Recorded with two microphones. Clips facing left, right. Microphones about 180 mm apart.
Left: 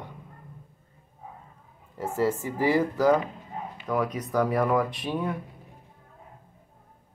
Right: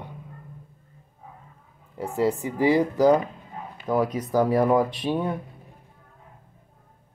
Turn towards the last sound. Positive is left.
turn(degrees=-30)  # may be behind; listen again after turning